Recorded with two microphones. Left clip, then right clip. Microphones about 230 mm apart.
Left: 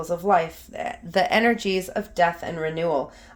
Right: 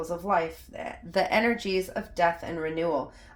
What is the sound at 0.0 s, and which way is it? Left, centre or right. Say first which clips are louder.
Speech: left 6 dB; left.